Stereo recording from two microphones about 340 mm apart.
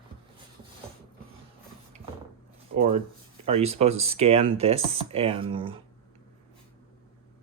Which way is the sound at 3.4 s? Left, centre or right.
Centre.